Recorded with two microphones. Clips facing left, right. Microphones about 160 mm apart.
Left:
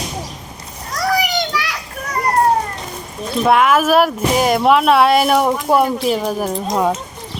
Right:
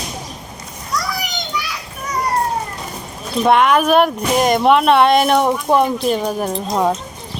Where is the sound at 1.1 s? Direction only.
90° left.